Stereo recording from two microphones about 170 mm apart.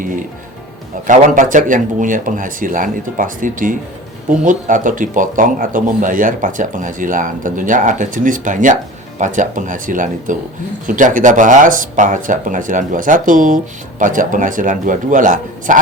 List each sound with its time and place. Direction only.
0.0 s speech: 50° right (ahead or behind)